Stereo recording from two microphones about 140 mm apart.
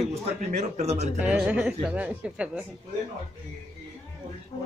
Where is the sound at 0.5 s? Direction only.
55° right (ahead or behind).